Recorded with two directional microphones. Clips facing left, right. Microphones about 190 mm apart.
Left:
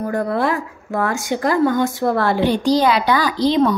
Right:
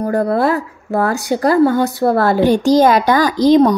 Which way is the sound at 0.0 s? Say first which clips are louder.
Right 4 dB; 40° right (ahead or behind).